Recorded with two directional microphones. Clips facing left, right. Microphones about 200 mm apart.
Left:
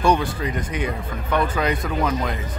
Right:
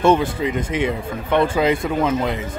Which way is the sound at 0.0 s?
25° right (ahead or behind).